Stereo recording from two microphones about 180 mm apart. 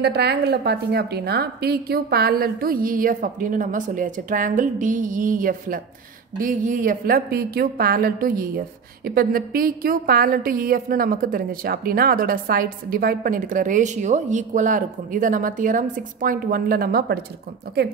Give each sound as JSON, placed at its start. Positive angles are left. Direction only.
{"t": 0.0, "sound": "a woman's voice", "side_deg": -65}